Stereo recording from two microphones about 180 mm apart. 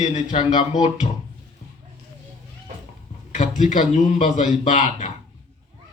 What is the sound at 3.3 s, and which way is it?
A man's voice, 45° left (ahead or behind).